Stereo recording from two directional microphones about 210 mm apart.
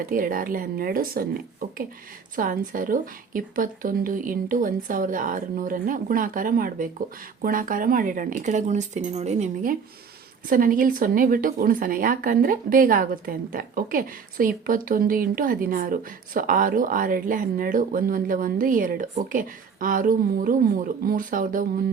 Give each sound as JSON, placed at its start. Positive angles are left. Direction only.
{"t": 0.0, "sound": "speech", "side_deg": -40}